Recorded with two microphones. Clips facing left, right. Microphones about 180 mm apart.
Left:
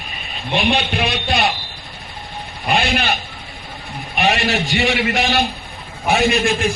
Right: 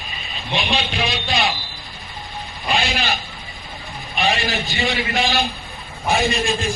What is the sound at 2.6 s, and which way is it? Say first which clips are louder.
Speech: left 4 dB; 60° left (ahead or behind).